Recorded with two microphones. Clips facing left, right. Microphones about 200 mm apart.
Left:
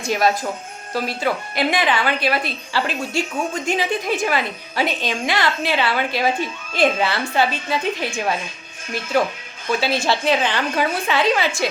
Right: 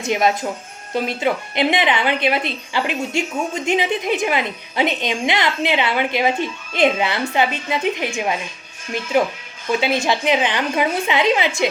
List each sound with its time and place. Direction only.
0.0 s a woman's voice: 20° right (ahead or behind)